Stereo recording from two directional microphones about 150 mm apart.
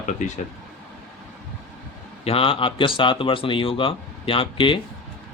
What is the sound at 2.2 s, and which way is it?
Speech, 40° left (ahead or behind).